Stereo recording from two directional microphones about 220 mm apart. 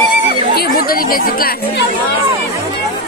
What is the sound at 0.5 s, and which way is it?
Chatter, 45° left (ahead or behind).